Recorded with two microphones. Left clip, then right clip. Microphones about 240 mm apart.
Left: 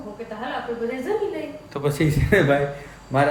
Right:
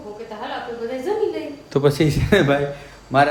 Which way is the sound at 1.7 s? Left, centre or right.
Right.